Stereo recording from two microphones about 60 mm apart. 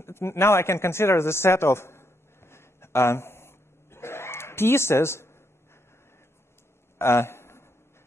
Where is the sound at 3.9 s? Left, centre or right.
Left.